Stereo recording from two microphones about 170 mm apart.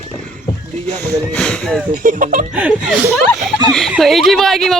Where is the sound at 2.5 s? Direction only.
5° right (ahead or behind).